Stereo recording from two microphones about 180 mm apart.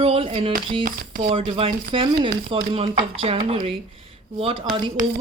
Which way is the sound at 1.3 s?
30° right (ahead or behind).